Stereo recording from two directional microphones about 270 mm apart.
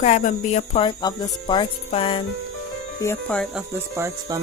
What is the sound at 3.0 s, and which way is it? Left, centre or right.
Speech, centre.